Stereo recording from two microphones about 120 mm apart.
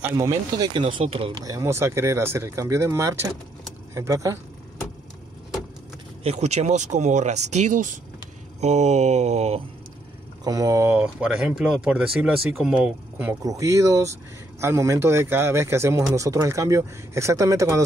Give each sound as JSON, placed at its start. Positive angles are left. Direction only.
{"t": 0.0, "sound": "speech", "side_deg": -25}
{"t": 0.7, "sound": "speech", "side_deg": -45}
{"t": 1.0, "sound": "speech", "side_deg": -55}
{"t": 1.4, "sound": "speech", "side_deg": -25}
{"t": 6.2, "sound": "speech", "side_deg": -65}
{"t": 8.5, "sound": "speech", "side_deg": -70}
{"t": 10.4, "sound": "speech", "side_deg": -30}
{"t": 13.3, "sound": "speech", "side_deg": -30}